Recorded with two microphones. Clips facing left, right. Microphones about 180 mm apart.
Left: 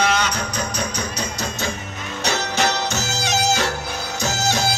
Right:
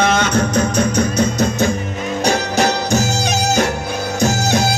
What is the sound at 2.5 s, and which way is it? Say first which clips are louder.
Music: right 6 dB; 40° right (ahead or behind).